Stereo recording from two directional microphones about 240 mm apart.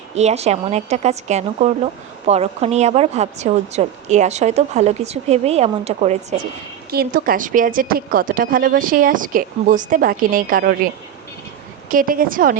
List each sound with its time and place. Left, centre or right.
0.2 s a woman's voice: right
6.9 s a woman's voice: right
11.9 s a woman's voice: right